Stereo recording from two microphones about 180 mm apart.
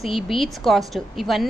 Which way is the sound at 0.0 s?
Centre (ahead or behind).